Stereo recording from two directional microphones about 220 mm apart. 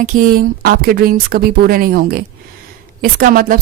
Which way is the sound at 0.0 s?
35° right (ahead or behind).